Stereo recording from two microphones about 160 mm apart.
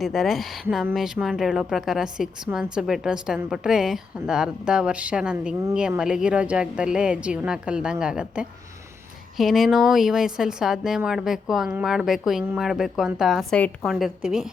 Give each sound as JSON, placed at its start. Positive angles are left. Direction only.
{"t": 0.0, "sound": "speech", "side_deg": 0}